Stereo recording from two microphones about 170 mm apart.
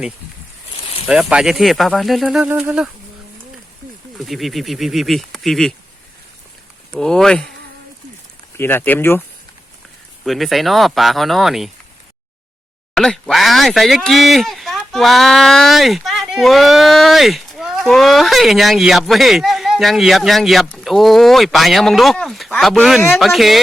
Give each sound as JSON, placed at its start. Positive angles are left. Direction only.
{"t": 0.8, "sound": "a sound", "side_deg": 35}
{"t": 1.0, "sound": "speech", "side_deg": -5}
{"t": 4.3, "sound": "speech", "side_deg": 0}
{"t": 6.9, "sound": "speech", "side_deg": 5}
{"t": 8.5, "sound": "speech", "side_deg": 10}
{"t": 10.2, "sound": "speech", "side_deg": 0}
{"t": 12.9, "sound": "speech", "side_deg": 5}